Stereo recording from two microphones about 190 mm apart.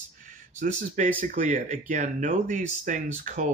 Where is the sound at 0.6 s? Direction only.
45° right (ahead or behind).